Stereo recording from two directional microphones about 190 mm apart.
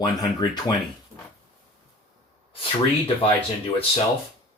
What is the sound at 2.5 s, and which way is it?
Speech, 30° left (ahead or behind).